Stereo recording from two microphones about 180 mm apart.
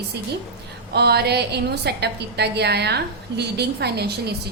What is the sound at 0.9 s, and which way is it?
A woman's voice, 65° right (ahead or behind).